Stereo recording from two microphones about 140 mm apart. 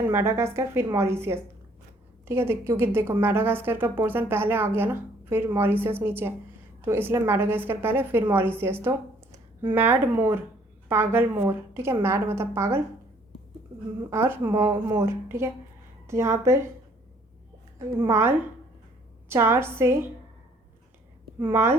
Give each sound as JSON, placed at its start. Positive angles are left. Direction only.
{"t": 0.0, "sound": "a woman's voice", "side_deg": -15}
{"t": 14.1, "sound": "a woman's voice", "side_deg": -15}
{"t": 18.0, "sound": "a woman's voice", "side_deg": -20}
{"t": 21.5, "sound": "a woman's voice", "side_deg": -20}